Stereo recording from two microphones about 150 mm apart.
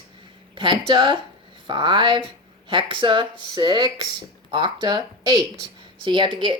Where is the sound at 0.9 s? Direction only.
35° right (ahead or behind).